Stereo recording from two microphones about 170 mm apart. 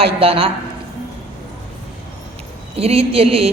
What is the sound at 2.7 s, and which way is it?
Speech, 35° right (ahead or behind).